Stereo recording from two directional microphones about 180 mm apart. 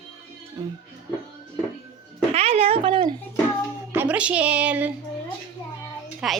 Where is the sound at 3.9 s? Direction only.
10° right (ahead or behind).